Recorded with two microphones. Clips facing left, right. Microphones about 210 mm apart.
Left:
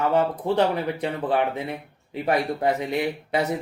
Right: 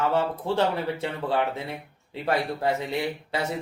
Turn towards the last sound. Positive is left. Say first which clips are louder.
# left 4 dB
turn(degrees=20)  # may be behind; listen again after turning